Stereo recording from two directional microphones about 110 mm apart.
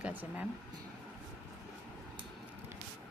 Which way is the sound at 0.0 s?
15° right (ahead or behind).